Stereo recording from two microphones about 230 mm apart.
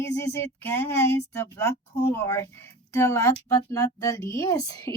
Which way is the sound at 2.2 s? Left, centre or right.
Centre.